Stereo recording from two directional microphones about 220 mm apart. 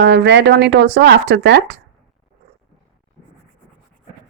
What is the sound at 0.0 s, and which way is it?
Speech, 50° right (ahead or behind).